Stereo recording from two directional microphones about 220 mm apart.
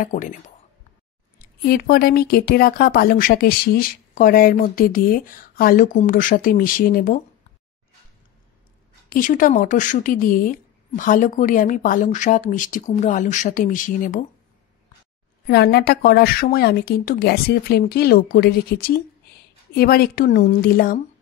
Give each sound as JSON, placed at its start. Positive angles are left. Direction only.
{"t": 0.0, "sound": "speech", "side_deg": 35}
{"t": 1.6, "sound": "speech", "side_deg": 45}
{"t": 9.1, "sound": "speech", "side_deg": 40}
{"t": 15.4, "sound": "speech", "side_deg": 45}